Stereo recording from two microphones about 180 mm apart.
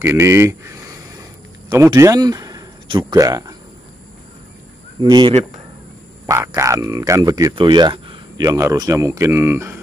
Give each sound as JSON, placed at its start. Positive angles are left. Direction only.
{"t": 0.0, "sound": "speech", "side_deg": -15}
{"t": 5.0, "sound": "speech", "side_deg": -25}